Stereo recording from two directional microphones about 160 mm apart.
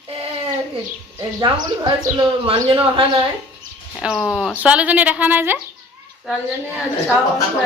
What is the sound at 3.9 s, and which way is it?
Speech, centre (ahead or behind).